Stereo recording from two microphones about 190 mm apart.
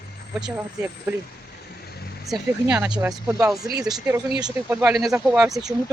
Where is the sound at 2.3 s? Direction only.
5° right (ahead or behind).